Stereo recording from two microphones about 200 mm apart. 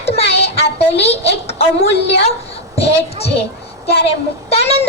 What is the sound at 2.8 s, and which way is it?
A child's voice, 30° left (ahead or behind).